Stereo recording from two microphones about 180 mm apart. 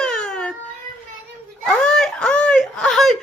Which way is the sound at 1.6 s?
5° left (ahead or behind).